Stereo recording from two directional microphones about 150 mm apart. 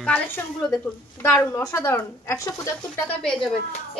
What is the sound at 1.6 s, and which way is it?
Speech, 20° left (ahead or behind).